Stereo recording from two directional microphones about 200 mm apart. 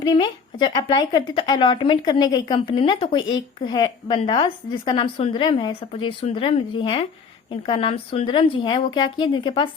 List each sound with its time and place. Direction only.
0.0 s a woman's voice: 20° left (ahead or behind)